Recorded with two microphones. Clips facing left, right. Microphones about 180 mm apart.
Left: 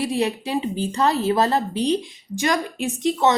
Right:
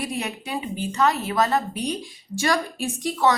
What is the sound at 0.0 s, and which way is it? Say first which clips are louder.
A woman's voice: left 7 dB; 30° left (ahead or behind).